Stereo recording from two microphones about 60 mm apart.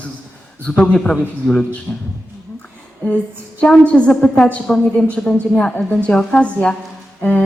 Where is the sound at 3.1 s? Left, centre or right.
Left.